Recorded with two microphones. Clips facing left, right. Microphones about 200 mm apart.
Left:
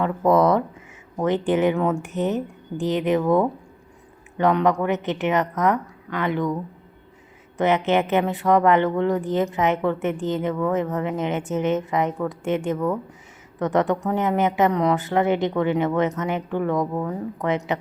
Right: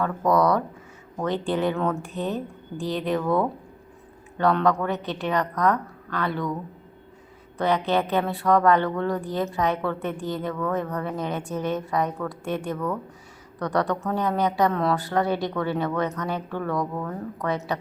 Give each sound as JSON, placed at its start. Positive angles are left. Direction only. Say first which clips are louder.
{"t": 0.0, "sound": "a woman's voice", "louder": "left 3 dB", "side_deg": 25}
{"t": 7.9, "sound": "a woman's voice", "louder": "left 3 dB", "side_deg": 20}